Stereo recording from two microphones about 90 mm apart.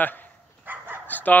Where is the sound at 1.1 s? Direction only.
20° left (ahead or behind).